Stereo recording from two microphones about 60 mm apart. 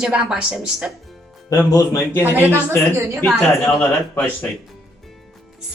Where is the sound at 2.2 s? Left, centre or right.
Right.